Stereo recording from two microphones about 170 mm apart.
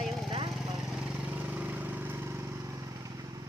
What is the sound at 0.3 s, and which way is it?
Lawn mower, 30° right (ahead or behind).